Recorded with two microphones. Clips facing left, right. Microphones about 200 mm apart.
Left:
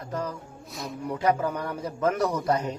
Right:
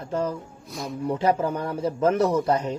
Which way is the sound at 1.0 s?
25° right (ahead or behind).